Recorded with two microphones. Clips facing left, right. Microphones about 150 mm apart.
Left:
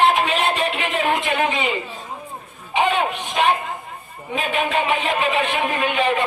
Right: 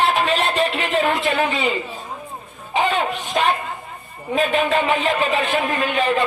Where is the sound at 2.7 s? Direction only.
35° right (ahead or behind).